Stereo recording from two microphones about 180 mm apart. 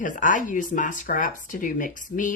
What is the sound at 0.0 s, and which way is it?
Speech, 45° left (ahead or behind).